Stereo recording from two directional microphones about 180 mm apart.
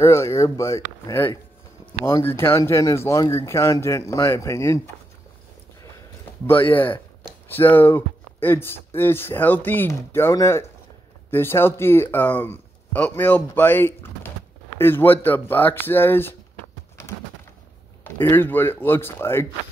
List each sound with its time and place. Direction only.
0.0 s speech: 15° left (ahead or behind)
6.4 s speech: 10° left (ahead or behind)
18.0 s speech: 10° left (ahead or behind)